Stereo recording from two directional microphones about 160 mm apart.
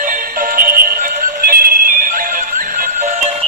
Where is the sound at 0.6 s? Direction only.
65° right (ahead or behind).